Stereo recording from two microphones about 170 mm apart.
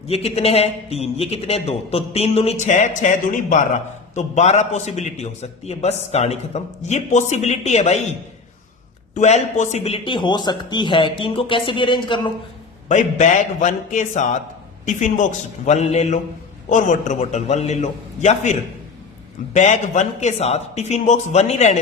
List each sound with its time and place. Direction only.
0.1 s a man's voice: 35° left (ahead or behind)
9.1 s speech: 45° left (ahead or behind)
12.9 s a man's voice: 45° left (ahead or behind)
19.5 s a man's voice: 45° left (ahead or behind)